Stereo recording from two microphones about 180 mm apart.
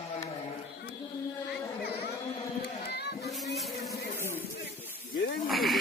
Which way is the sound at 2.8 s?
65° left (ahead or behind).